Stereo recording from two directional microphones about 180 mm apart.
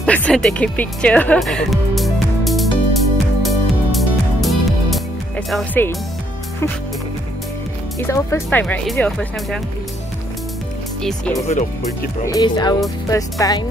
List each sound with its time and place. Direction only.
0.0 s music: 5° left (ahead or behind)
5.5 s speech: 5° left (ahead or behind)
8.0 s speech: 15° left (ahead or behind)
11.0 s speech: 5° left (ahead or behind)
12.3 s speech: 20° left (ahead or behind)